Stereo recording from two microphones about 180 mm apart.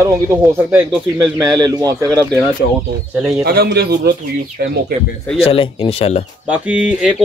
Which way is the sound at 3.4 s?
60° right (ahead or behind).